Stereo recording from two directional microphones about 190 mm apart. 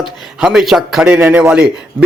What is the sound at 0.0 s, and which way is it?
Speech, 5° right (ahead or behind).